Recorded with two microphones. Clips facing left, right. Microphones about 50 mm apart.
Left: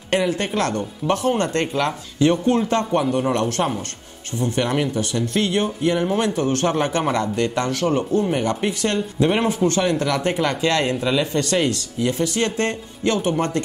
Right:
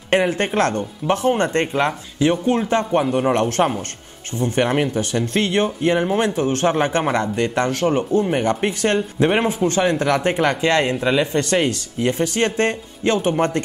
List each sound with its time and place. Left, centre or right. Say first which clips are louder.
0.1 s speech: right 3 dB; right
3.3 s speech: right 3 dB; right